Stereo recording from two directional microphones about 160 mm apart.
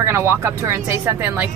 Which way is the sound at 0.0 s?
15° right (ahead or behind).